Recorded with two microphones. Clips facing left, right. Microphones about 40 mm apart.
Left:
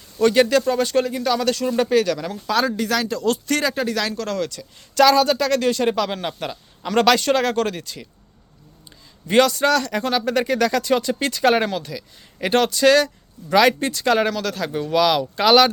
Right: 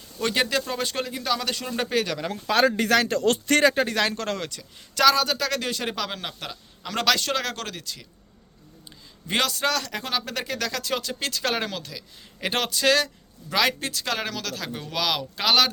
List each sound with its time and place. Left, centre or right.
0.2 s a man's voice: centre
2.2 s speech: right
4.4 s speech: centre
5.0 s a man's voice: centre
9.2 s a man's voice: centre